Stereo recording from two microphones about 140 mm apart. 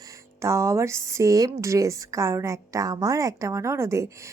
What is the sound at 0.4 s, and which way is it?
Speech, 20° right (ahead or behind).